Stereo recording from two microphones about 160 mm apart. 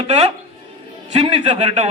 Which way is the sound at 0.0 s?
40° right (ahead or behind).